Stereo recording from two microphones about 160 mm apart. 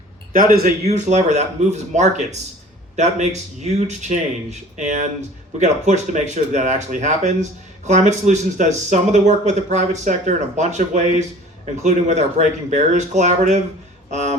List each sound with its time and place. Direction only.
0.3 s a man's voice: 65° right (ahead or behind)
0.9 s speech: 45° right (ahead or behind)